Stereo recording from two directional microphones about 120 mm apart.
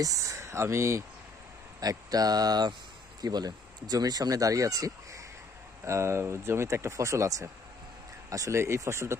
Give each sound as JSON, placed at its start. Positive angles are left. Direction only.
{"t": 0.0, "sound": "speech", "side_deg": -25}